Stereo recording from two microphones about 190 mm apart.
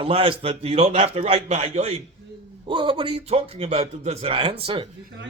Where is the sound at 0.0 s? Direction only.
30° right (ahead or behind).